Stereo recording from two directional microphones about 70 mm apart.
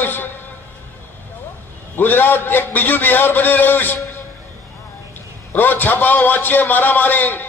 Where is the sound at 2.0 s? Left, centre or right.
Left.